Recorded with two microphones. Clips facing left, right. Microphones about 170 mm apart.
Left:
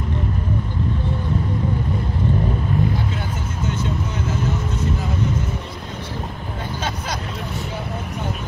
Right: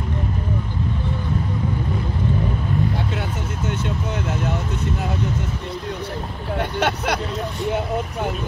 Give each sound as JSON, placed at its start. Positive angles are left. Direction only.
{"t": 6.6, "sound": "vehicle", "side_deg": -70}